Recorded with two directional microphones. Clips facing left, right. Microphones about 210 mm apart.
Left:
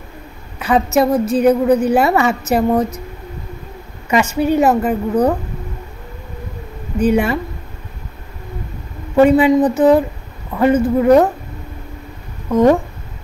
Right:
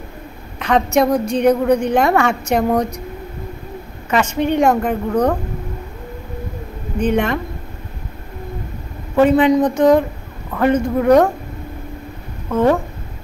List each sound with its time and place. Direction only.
0.6 s a woman's voice: 5° left (ahead or behind)
4.1 s a woman's voice: 10° left (ahead or behind)
7.0 s a woman's voice: 10° left (ahead or behind)
9.1 s a woman's voice: 10° left (ahead or behind)
12.4 s a woman's voice: 15° left (ahead or behind)